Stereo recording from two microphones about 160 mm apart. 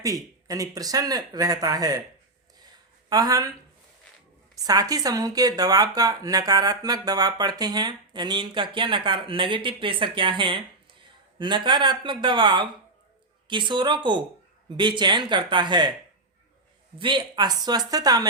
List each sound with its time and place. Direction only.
0.0 s speech: 20° right (ahead or behind)
3.1 s speech: 25° right (ahead or behind)
4.5 s speech: 20° right (ahead or behind)
17.0 s speech: 30° right (ahead or behind)